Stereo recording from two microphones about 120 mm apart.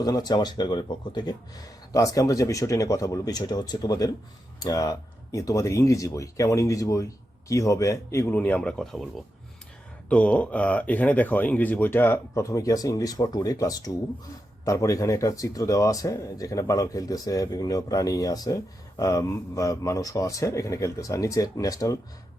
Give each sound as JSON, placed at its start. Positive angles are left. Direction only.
{"t": 0.0, "sound": "speech", "side_deg": 35}